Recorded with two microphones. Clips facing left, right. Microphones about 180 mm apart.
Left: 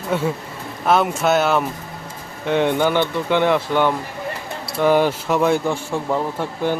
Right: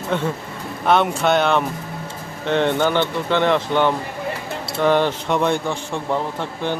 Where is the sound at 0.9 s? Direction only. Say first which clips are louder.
Even; centre (ahead or behind).